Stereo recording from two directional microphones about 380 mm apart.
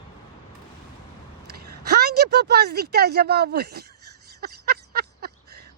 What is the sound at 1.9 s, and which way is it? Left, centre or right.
Speech, right.